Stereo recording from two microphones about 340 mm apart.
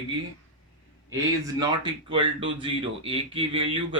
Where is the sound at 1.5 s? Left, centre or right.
Centre.